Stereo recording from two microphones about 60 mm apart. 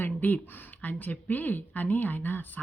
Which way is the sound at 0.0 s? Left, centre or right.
Left.